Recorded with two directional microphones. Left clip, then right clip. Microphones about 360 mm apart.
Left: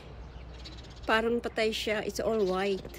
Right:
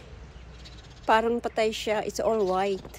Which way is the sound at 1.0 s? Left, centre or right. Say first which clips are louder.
Right 5 dB; centre.